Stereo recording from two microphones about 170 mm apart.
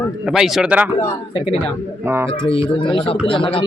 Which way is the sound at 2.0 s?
15° right (ahead or behind).